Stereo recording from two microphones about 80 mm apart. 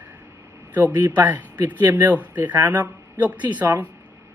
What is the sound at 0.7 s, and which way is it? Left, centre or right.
Speech, centre.